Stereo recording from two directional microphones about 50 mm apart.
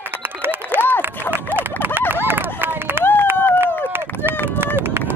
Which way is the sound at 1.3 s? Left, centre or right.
Right.